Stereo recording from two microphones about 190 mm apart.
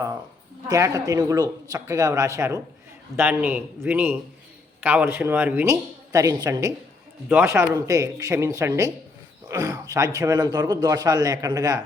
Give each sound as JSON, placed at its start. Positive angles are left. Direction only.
{"t": 0.7, "sound": "a man's voice", "side_deg": -15}